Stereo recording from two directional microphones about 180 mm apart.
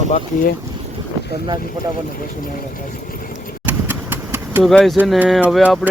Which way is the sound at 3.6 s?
10° right (ahead or behind).